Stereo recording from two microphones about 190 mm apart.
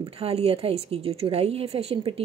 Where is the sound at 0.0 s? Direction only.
30° right (ahead or behind).